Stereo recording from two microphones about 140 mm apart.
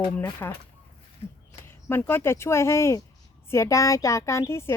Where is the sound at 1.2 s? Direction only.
45° left (ahead or behind).